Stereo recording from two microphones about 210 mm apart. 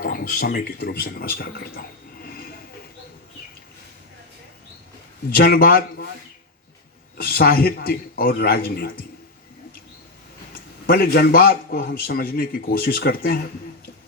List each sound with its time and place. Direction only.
0.0 s a man's voice: 45° left (ahead or behind)
2.2 s a sound: 45° left (ahead or behind)
5.3 s a man's voice: 45° left (ahead or behind)
7.2 s a man's voice: 45° left (ahead or behind)
10.5 s a man's voice: 45° left (ahead or behind)